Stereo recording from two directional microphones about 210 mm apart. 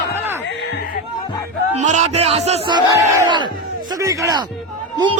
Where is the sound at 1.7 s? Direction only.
35° right (ahead or behind).